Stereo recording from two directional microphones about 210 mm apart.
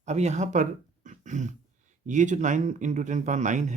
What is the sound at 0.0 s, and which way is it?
Speech, 35° right (ahead or behind).